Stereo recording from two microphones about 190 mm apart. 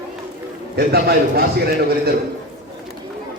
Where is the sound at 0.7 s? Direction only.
55° right (ahead or behind).